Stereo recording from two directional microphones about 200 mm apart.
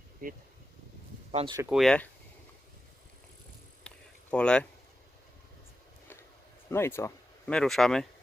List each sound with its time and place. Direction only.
0.2 s speech: 45° right (ahead or behind)
1.3 s speech: 30° right (ahead or behind)
1.7 s speech: centre (ahead or behind)
3.8 s a sound: 5° left (ahead or behind)
6.7 s speech: 10° left (ahead or behind)